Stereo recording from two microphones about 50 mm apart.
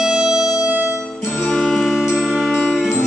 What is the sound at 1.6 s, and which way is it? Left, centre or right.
Music, centre.